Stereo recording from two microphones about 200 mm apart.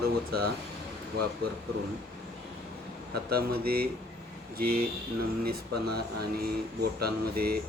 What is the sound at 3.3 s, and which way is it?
Speech, 50° right (ahead or behind).